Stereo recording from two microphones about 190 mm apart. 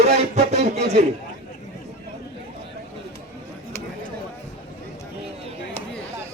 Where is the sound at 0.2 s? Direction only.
35° right (ahead or behind).